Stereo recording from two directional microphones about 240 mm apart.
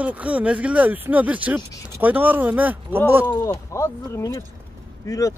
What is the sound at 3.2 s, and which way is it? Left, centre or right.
Speech, centre.